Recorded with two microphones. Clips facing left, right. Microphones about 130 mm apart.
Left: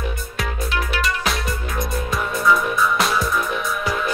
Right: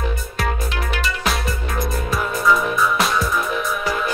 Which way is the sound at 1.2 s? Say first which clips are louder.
Right 1 dB; centre (ahead or behind).